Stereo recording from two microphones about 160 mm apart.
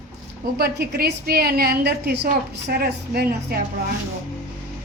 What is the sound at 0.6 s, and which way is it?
A woman's voice, 80° right.